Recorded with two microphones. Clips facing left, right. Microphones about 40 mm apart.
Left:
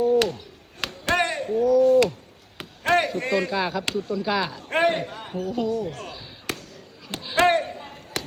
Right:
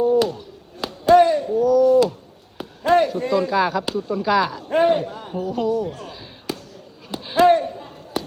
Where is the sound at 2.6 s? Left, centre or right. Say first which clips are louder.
Right 5 dB; left.